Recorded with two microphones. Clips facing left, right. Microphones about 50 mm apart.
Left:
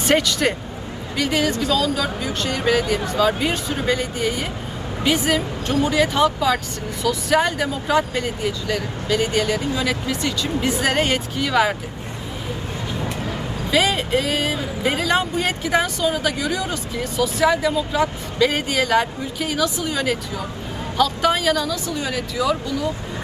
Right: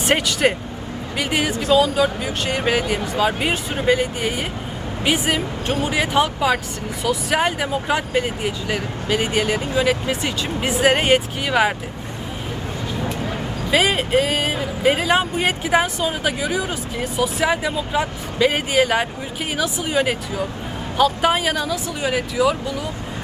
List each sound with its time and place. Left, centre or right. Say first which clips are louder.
0.4 s speech: right 2 dB; right
13.7 s speech: right 1 dB; right